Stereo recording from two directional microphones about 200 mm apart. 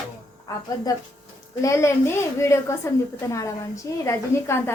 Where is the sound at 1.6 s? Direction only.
15° left (ahead or behind).